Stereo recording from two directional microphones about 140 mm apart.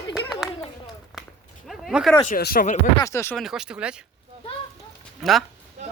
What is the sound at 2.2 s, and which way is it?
Speech, 85° left.